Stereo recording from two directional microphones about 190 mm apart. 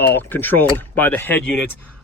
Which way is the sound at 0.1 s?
10° left (ahead or behind).